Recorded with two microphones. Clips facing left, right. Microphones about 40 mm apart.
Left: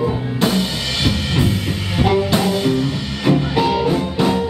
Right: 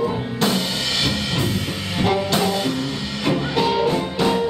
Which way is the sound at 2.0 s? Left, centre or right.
Centre.